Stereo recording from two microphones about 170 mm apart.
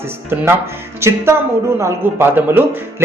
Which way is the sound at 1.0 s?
15° right (ahead or behind).